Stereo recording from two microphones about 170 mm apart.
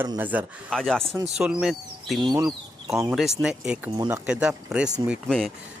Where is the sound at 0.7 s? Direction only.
5° left (ahead or behind).